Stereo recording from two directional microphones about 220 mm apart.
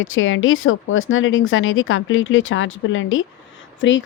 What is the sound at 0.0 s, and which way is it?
Speech, 65° left (ahead or behind).